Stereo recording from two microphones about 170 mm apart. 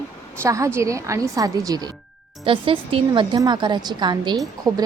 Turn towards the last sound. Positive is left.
turn(degrees=-20)  # may be behind; listen again after turning